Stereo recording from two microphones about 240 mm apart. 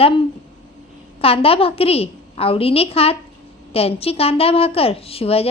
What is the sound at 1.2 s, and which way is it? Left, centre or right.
A woman's voice, left.